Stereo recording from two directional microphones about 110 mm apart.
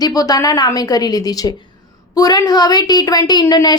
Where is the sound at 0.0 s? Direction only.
35° left (ahead or behind).